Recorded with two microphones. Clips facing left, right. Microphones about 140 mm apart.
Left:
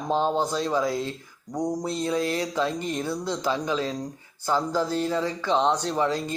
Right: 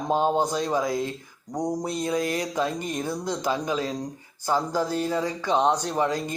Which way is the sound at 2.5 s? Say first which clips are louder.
Even; 15° right (ahead or behind).